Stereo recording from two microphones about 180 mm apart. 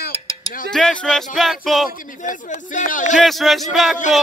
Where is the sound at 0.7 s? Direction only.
5° left (ahead or behind).